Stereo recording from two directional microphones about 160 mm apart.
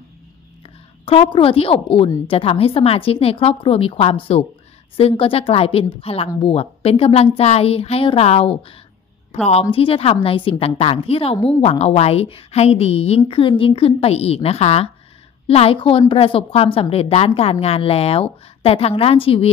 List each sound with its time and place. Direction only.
1.0 s a woman's voice: 35° left (ahead or behind)